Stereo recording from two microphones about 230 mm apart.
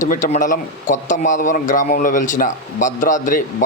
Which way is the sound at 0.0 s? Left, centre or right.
Left.